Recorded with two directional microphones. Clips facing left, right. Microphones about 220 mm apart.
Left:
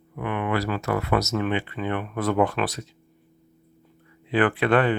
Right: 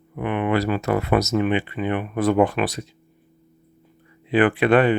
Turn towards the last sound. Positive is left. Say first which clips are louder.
# right 4 dB
turn(degrees=-15)  # may be behind; listen again after turning